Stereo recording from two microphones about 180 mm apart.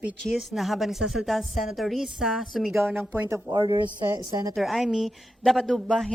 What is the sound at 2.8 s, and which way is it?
Speech, 10° right (ahead or behind).